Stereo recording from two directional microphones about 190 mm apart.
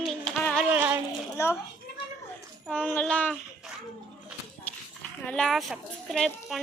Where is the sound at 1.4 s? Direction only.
15° left (ahead or behind).